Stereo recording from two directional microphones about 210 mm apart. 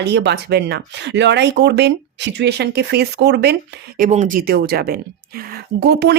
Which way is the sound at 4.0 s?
35° right (ahead or behind).